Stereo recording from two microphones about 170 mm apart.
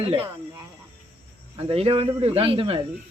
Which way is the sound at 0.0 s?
35° right (ahead or behind).